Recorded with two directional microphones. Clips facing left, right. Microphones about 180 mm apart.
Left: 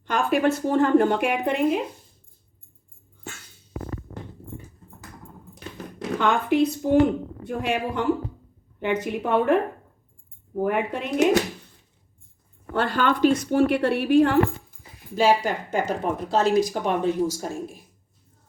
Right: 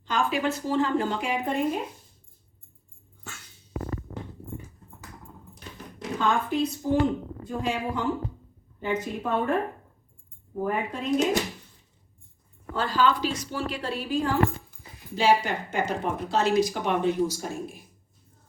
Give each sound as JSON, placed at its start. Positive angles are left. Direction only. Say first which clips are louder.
{"t": 0.0, "sound": "speech", "louder": "left 5 dB", "side_deg": 60}
{"t": 5.5, "sound": "a sound", "louder": "left 7 dB", "side_deg": 75}
{"t": 7.4, "sound": "a woman's voice", "louder": "left 3 dB", "side_deg": 70}
{"t": 10.6, "sound": "a woman's voice", "louder": "left 4 dB", "side_deg": 70}
{"t": 12.7, "sound": "speech", "louder": "left 1 dB", "side_deg": 60}
{"t": 15.1, "sound": "speech", "louder": "left 2 dB", "side_deg": 45}